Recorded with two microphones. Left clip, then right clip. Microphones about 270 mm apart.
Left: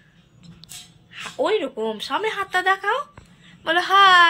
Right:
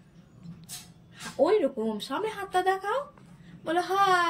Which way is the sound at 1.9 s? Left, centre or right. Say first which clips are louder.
Left 7 dB; centre.